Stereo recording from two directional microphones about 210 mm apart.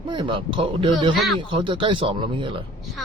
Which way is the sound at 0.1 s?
25° right (ahead or behind).